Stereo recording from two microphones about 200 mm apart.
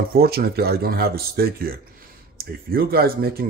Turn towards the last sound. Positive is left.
turn(degrees=-50)  # may be behind; listen again after turning